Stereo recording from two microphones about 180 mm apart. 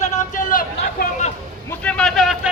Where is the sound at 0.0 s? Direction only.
40° left (ahead or behind).